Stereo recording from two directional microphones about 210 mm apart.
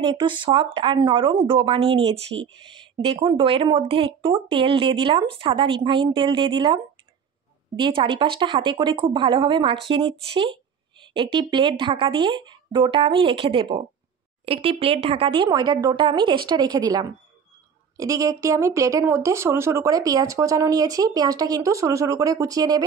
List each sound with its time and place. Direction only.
0.0 s a woman's voice: 25° right (ahead or behind)